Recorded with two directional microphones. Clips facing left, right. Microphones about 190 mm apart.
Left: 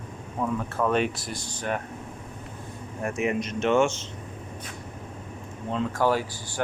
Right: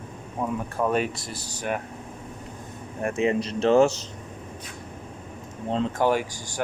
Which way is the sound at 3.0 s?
30° right (ahead or behind).